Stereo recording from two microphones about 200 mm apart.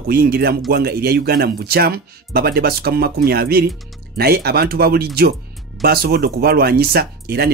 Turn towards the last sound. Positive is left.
turn(degrees=-50)  # may be behind; listen again after turning